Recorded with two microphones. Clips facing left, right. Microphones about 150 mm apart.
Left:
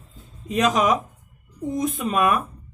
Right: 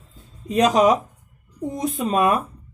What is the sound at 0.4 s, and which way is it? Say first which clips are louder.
Speech: right 4 dB; 35° right (ahead or behind).